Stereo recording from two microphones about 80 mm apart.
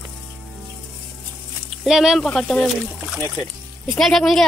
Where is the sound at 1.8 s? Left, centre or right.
Centre.